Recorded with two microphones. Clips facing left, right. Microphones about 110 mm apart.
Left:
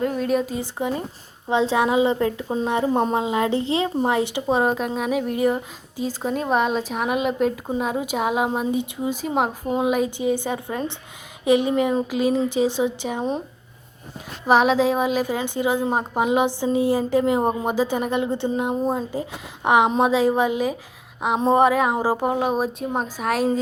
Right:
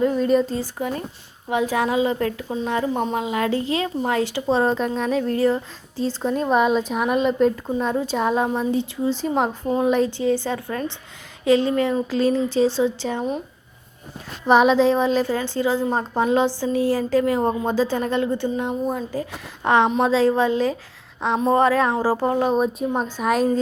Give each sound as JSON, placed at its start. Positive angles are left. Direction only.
{"t": 0.0, "sound": "speech", "side_deg": 0}
{"t": 0.6, "sound": "a woman's voice", "side_deg": 20}
{"t": 2.9, "sound": "a woman's voice", "side_deg": 35}
{"t": 14.4, "sound": "a woman's voice", "side_deg": 0}